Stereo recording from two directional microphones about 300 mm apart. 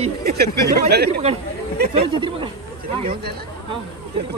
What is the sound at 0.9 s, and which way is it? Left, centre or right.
Speech, right.